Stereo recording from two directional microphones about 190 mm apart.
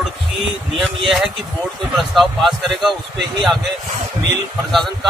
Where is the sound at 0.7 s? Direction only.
Centre (ahead or behind).